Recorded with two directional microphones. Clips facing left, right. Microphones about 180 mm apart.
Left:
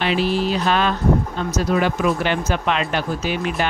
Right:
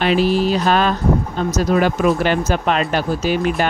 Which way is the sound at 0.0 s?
45° right (ahead or behind).